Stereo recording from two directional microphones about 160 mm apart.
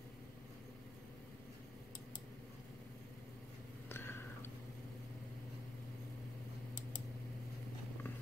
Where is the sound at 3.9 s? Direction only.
15° left (ahead or behind).